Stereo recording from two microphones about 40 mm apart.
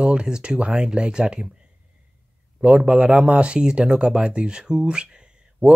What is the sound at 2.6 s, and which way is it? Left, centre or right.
Speech, right.